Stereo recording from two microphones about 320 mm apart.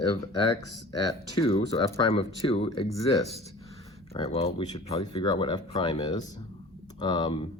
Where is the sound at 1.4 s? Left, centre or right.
Centre.